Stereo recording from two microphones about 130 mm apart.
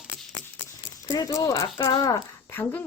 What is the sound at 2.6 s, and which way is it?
Speech, 15° left (ahead or behind).